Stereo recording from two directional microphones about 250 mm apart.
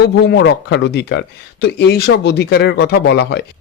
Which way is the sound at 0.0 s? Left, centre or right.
Left.